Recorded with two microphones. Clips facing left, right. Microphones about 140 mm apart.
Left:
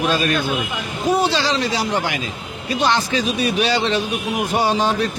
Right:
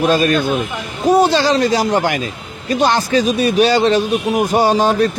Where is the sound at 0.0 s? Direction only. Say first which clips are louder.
Right 5 dB; 45° right (ahead or behind).